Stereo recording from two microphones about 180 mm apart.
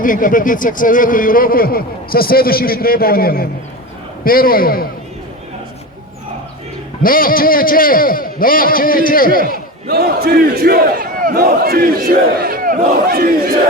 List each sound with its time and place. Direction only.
0.0 s a man's voice: 50° left (ahead or behind)
7.0 s a man's voice: 50° left (ahead or behind)
9.8 s speech: 60° right (ahead or behind)